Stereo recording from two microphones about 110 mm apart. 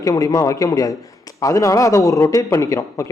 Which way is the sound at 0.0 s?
30° left (ahead or behind).